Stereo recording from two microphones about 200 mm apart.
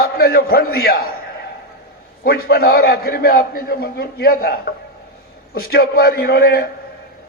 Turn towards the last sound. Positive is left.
turn(degrees=50)  # may be behind; listen again after turning